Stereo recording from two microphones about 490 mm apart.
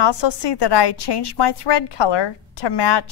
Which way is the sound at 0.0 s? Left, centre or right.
Left.